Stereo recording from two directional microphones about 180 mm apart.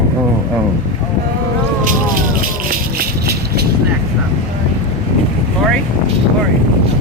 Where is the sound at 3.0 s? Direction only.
60° right (ahead or behind).